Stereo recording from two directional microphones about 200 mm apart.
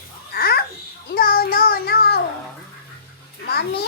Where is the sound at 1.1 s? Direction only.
45° left (ahead or behind).